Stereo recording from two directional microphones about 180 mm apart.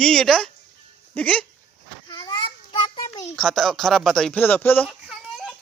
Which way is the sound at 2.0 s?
25° left (ahead or behind).